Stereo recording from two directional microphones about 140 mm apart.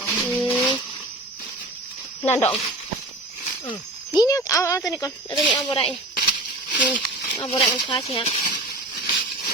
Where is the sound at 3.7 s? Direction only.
30° left (ahead or behind).